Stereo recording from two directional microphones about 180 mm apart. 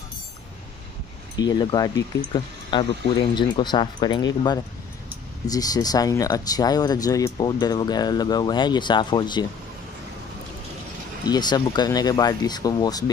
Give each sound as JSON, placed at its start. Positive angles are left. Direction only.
{"t": 1.4, "sound": "speech", "side_deg": 25}
{"t": 5.5, "sound": "speech", "side_deg": 20}
{"t": 11.2, "sound": "speech", "side_deg": 25}